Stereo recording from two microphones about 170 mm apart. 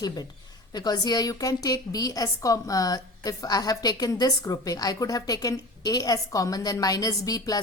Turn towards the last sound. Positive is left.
turn(degrees=20)  # may be behind; listen again after turning